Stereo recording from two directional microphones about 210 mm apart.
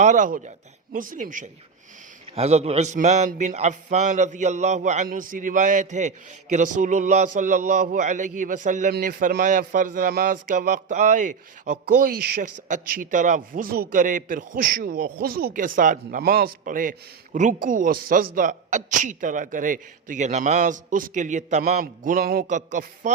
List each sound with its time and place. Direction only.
0.0 s a man's voice: 35° right (ahead or behind)